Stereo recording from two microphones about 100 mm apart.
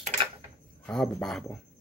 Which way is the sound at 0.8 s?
5° left (ahead or behind).